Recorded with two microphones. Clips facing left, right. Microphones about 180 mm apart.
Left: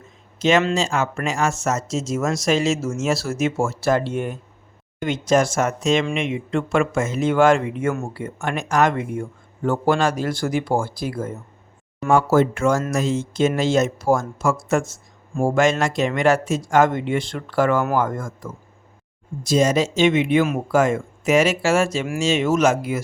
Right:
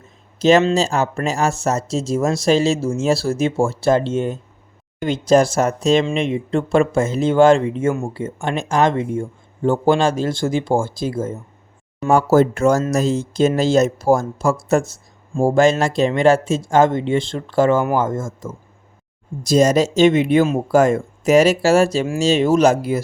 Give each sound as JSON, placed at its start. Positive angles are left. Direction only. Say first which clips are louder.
{"t": 0.3, "sound": "speech", "louder": "right 4 dB", "side_deg": -35}
{"t": 12.0, "sound": "speech", "louder": "right 3 dB", "side_deg": -40}
{"t": 19.4, "sound": "speech", "louder": "right 4 dB", "side_deg": -40}